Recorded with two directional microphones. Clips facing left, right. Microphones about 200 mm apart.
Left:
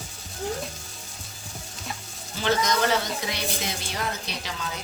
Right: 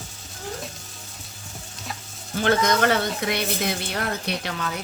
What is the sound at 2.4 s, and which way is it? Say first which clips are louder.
Speech: right 4 dB; 55° right (ahead or behind).